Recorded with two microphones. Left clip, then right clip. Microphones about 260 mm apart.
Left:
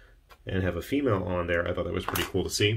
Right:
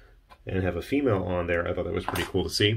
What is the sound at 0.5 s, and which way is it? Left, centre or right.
Speech, centre.